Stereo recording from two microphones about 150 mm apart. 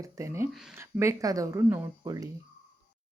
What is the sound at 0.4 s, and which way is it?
Speech, centre (ahead or behind).